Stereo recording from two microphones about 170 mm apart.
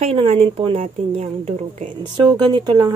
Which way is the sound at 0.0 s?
40° right (ahead or behind).